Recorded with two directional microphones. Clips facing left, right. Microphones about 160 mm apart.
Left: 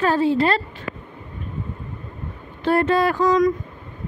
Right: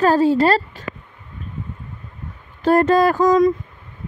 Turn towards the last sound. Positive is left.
turn(degrees=-45)  # may be behind; listen again after turning